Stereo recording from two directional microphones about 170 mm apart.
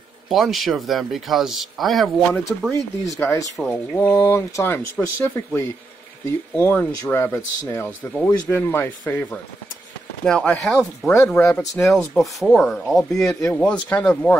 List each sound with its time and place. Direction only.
0.3 s speech: centre (ahead or behind)
2.7 s speech: 15° left (ahead or behind)